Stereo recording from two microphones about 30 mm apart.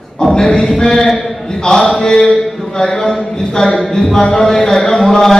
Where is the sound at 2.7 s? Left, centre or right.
Left.